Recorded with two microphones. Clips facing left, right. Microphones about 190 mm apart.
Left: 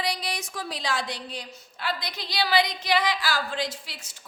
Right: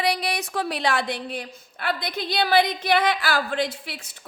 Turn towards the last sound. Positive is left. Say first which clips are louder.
# right 5 dB
turn(degrees=-60)  # may be behind; listen again after turning